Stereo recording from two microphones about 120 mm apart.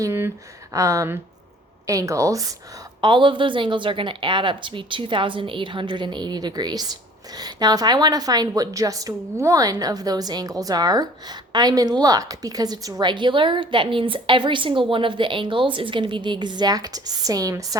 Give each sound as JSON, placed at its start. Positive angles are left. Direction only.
{"t": 0.0, "sound": "a sound", "side_deg": -20}
{"t": 0.7, "sound": "speech", "side_deg": -25}
{"t": 3.0, "sound": "a woman's voice", "side_deg": -40}